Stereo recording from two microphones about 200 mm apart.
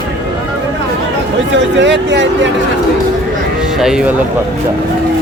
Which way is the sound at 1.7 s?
65° right (ahead or behind).